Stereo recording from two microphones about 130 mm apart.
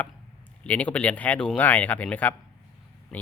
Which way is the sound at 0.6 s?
10° left (ahead or behind).